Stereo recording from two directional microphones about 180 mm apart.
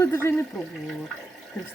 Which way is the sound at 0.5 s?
Centre (ahead or behind).